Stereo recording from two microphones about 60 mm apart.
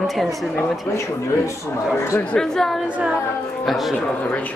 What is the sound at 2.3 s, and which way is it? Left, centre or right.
Speech, centre.